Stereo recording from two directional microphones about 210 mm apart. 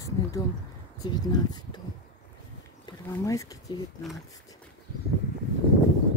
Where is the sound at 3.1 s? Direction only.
15° left (ahead or behind).